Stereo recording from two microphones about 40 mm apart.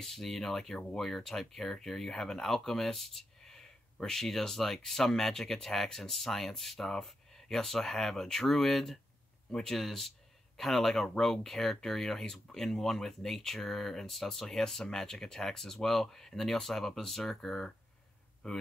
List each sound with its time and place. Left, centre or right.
0.0 s speech: centre